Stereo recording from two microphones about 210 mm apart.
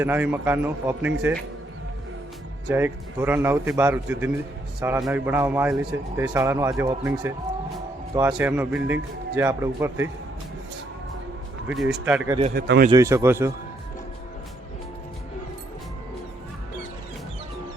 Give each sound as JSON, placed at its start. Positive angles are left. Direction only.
{"t": 0.0, "sound": "speech", "side_deg": -10}
{"t": 2.6, "sound": "speech", "side_deg": -10}
{"t": 11.7, "sound": "speech", "side_deg": 0}
{"t": 12.5, "sound": "speech", "side_deg": -50}
{"t": 12.9, "sound": "speech", "side_deg": -15}